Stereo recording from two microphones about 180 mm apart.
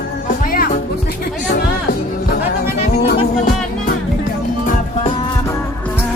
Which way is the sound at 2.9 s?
55° left (ahead or behind).